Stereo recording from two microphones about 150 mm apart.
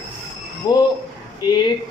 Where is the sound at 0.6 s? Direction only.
25° left (ahead or behind).